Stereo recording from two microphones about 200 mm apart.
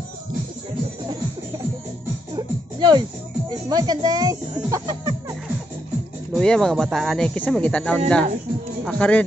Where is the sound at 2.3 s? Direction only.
20° right (ahead or behind).